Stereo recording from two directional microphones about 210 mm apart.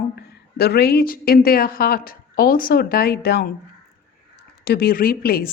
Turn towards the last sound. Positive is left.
turn(degrees=45)  # may be behind; listen again after turning